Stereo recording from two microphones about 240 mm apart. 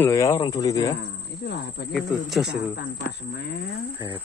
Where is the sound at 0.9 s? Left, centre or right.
Left.